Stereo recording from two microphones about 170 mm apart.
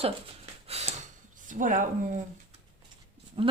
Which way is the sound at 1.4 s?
50° right (ahead or behind).